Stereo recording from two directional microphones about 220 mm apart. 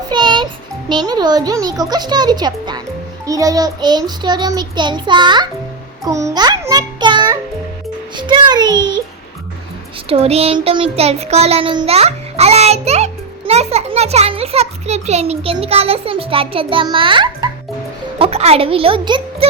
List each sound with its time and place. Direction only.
0.1 s music: 20° right (ahead or behind)
0.9 s a child's voice: 20° right (ahead or behind)
6.1 s music: 15° right (ahead or behind)
8.1 s a child's voice: 20° right (ahead or behind)
10.1 s a child's voice: 30° right (ahead or behind)